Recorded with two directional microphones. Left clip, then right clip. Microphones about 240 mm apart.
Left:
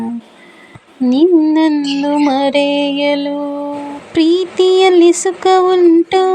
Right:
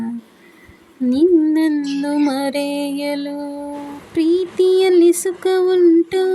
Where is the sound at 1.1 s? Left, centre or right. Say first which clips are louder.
Left 4 dB; centre.